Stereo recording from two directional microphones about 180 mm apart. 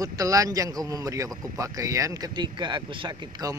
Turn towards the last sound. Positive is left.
turn(degrees=-20)  # may be behind; listen again after turning